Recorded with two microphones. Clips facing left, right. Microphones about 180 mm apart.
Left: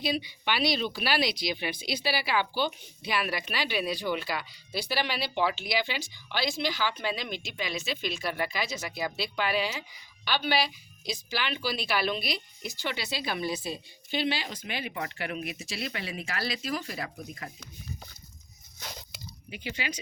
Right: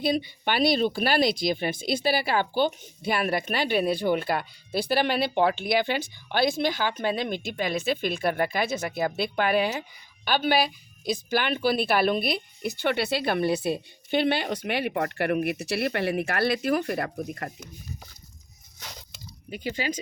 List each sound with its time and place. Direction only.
0.0 s speech: 50° right (ahead or behind)
19.5 s speech: 45° right (ahead or behind)